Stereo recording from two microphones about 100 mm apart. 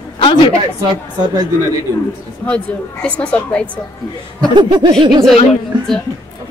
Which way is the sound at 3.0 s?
10° left (ahead or behind).